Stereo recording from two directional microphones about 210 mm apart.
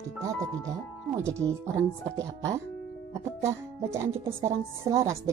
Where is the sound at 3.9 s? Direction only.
10° right (ahead or behind).